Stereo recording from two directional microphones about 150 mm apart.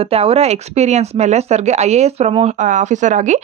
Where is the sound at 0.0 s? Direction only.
40° right (ahead or behind).